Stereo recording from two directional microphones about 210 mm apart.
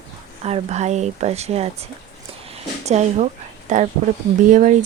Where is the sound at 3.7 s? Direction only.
35° right (ahead or behind).